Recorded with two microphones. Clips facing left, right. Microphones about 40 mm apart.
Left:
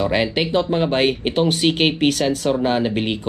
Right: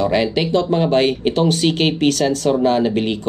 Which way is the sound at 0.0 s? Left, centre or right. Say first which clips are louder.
Right 2 dB; centre.